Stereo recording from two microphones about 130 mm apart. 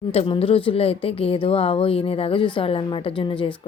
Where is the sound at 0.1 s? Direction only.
50° left (ahead or behind).